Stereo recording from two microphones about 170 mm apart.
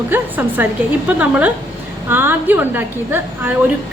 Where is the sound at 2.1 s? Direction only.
10° right (ahead or behind).